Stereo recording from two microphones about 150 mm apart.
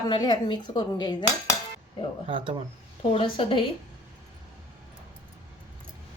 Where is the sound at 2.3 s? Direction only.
35° right (ahead or behind).